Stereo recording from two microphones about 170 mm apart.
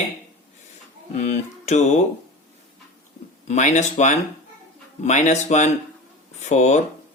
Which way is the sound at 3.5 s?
45° left (ahead or behind).